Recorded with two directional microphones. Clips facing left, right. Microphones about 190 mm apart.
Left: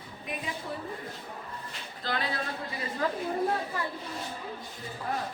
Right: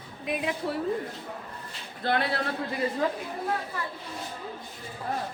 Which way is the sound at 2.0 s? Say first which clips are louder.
Right 6 dB; 60° right (ahead or behind).